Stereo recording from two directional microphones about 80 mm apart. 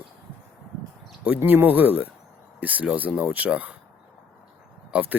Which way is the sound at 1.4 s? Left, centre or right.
Right.